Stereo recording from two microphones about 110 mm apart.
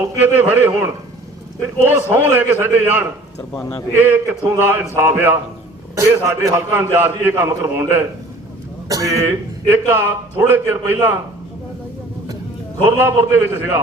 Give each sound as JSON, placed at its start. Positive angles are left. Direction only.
{"t": 0.0, "sound": "a man's voice", "side_deg": -15}
{"t": 13.0, "sound": "a man's voice", "side_deg": -25}